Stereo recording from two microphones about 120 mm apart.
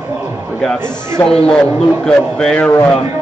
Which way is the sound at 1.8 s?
5° left (ahead or behind).